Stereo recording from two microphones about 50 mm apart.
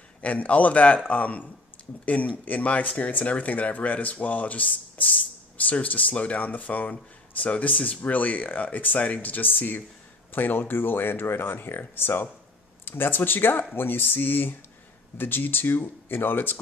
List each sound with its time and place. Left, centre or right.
0.2 s a man's voice: left